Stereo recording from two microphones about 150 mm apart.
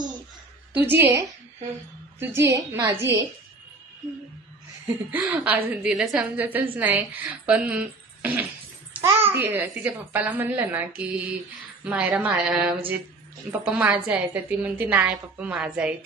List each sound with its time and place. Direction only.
0.7 s a woman's voice: 15° right (ahead or behind)
5.1 s a woman's voice: 10° right (ahead or behind)